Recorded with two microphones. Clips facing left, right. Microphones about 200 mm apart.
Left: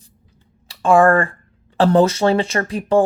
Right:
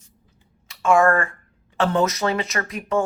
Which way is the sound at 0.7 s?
30° left (ahead or behind).